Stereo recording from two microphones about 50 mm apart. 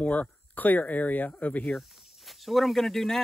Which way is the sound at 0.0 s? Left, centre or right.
Left.